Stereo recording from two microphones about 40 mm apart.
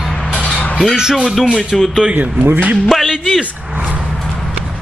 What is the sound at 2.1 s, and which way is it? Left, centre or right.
Speech, right.